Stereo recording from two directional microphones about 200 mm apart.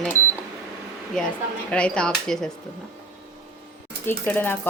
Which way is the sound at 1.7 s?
5° left (ahead or behind).